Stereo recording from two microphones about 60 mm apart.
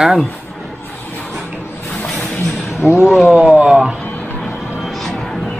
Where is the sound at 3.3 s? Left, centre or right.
Right.